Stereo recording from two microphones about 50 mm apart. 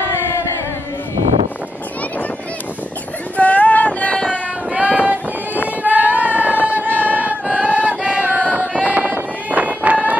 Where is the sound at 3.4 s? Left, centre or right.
Left.